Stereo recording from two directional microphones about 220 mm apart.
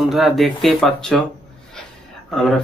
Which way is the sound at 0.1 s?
Centre (ahead or behind).